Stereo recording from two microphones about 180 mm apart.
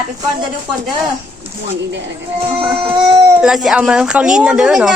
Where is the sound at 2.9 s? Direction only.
30° right (ahead or behind).